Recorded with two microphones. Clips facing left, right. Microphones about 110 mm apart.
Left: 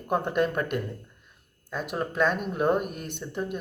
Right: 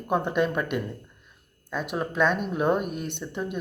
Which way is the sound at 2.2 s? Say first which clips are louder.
Right 2 dB; 45° left (ahead or behind).